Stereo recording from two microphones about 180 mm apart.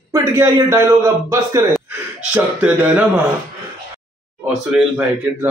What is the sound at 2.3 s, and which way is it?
Speech, 5° right (ahead or behind).